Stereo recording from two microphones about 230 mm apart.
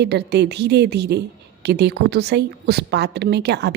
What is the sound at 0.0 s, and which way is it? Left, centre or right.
Speech, right.